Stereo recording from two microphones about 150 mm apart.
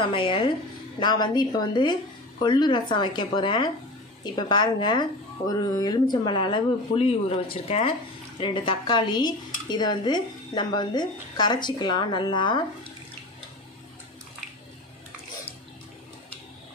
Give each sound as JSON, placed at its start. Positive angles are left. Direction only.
{"t": 0.0, "sound": "speech", "side_deg": 35}